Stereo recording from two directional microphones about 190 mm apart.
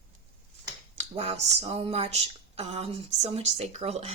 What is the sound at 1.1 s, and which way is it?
Speech, 35° right (ahead or behind).